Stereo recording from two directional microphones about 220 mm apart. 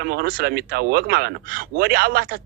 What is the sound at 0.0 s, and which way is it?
Speech, 45° right (ahead or behind).